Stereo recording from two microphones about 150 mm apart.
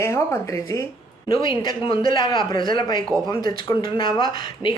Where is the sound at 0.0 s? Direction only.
20° left (ahead or behind).